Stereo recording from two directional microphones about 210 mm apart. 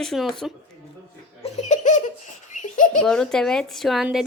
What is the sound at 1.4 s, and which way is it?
Laughter, 35° left (ahead or behind).